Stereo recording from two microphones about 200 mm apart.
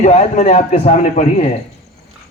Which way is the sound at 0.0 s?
35° left (ahead or behind).